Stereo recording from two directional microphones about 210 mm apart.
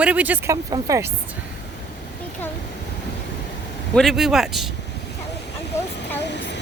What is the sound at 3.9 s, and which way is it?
Speech, centre (ahead or behind).